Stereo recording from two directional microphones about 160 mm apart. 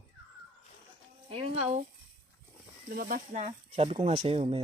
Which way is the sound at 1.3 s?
40° right (ahead or behind).